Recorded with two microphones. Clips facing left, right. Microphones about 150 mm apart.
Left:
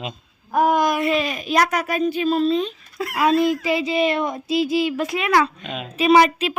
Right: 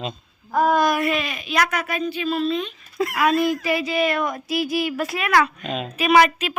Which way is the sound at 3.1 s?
20° left (ahead or behind).